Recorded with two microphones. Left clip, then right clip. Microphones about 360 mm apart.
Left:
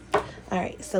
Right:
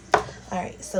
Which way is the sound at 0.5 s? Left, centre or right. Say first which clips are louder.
Left 2 dB; left.